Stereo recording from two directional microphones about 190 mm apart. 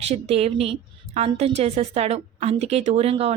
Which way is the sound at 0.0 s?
35° right (ahead or behind).